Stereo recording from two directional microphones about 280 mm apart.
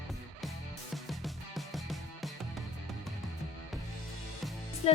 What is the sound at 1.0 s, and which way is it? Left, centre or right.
Music, centre.